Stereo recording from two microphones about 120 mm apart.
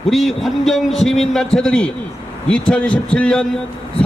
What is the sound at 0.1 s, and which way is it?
A man's voice, centre (ahead or behind).